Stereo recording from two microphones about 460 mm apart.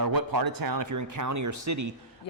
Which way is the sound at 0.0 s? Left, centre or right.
Right.